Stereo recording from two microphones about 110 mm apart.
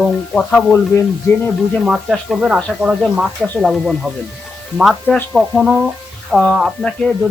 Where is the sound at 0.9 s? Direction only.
20° left (ahead or behind).